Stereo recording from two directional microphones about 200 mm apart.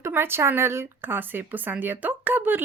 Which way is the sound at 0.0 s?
10° right (ahead or behind).